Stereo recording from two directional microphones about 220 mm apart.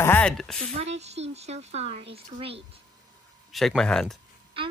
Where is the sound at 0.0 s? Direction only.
5° left (ahead or behind).